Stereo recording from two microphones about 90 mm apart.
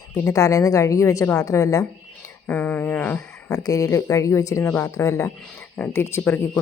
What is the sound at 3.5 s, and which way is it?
Speech, 40° left (ahead or behind).